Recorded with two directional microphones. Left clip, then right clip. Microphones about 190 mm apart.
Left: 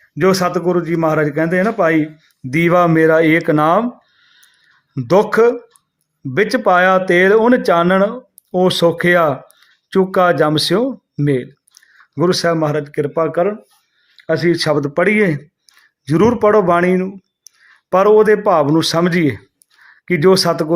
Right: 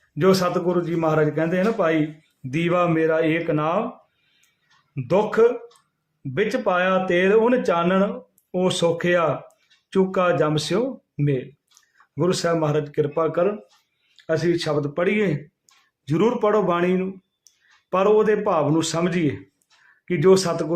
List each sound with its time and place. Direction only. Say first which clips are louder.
0.2 s a man's voice: left 5 dB; 35° left (ahead or behind)
5.0 s a man's voice: left 6 dB; 40° left (ahead or behind)